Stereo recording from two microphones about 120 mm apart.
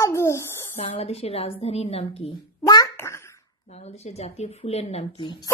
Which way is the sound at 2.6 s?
30° left (ahead or behind).